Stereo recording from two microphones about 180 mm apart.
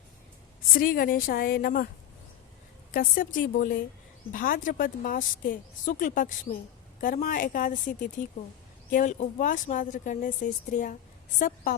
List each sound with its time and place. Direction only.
0.7 s a woman's voice: 50° left (ahead or behind)
2.9 s a woman's voice: 50° left (ahead or behind)
8.9 s a woman's voice: 45° left (ahead or behind)